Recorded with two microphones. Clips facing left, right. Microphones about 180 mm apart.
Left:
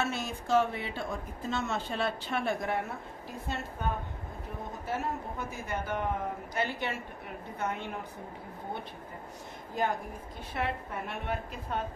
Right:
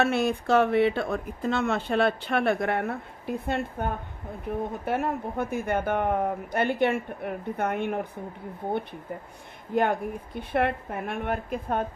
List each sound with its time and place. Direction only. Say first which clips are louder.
0.0 s speech: right 10 dB; 60° right (ahead or behind)
9.8 s speech: right 7 dB; 60° right (ahead or behind)